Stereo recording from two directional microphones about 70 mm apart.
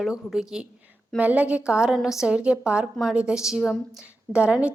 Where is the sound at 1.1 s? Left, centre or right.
Right.